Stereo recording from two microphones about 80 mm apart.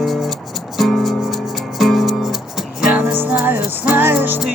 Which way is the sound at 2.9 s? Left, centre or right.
Centre.